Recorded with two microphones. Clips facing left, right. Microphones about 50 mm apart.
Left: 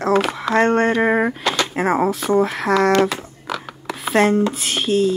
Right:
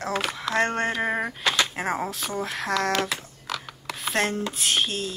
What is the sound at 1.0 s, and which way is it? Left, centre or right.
Speech, centre.